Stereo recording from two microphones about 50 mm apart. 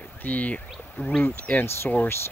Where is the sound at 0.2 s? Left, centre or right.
Left.